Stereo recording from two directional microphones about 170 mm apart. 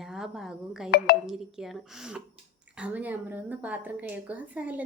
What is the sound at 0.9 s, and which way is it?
Speech, 70° left (ahead or behind).